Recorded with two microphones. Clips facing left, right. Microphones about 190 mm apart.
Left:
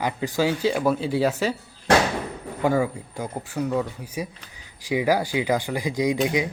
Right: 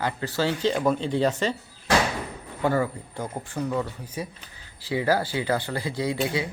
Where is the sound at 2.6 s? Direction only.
10° left (ahead or behind).